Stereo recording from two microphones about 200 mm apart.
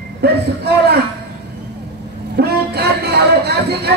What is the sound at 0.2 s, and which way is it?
Speech, 55° right (ahead or behind).